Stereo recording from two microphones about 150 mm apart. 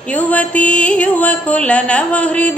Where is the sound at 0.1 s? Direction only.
10° left (ahead or behind).